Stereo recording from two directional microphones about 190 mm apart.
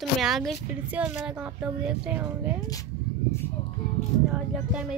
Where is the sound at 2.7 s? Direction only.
15° left (ahead or behind).